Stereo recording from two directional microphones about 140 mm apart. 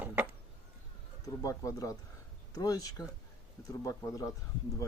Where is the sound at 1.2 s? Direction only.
25° left (ahead or behind).